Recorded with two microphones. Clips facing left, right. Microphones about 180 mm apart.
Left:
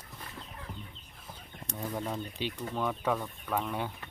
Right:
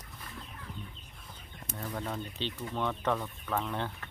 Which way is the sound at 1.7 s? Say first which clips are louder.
Left 2 dB; 10° left (ahead or behind).